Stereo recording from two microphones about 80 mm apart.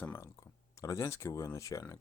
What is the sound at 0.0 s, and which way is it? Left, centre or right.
Speech, left.